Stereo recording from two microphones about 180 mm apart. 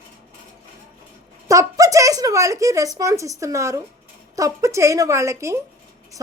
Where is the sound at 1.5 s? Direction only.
20° right (ahead or behind).